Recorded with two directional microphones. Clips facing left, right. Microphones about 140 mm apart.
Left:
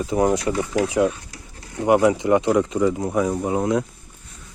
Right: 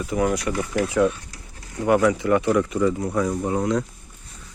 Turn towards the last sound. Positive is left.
turn(degrees=15)  # may be behind; listen again after turning